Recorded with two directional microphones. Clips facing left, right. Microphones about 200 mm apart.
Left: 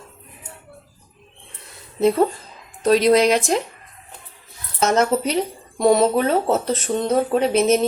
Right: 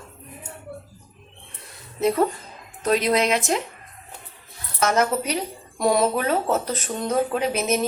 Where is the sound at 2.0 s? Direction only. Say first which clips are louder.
Left 4 dB; 30° left (ahead or behind).